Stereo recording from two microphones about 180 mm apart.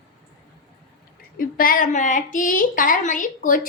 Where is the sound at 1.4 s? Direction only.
50° left (ahead or behind).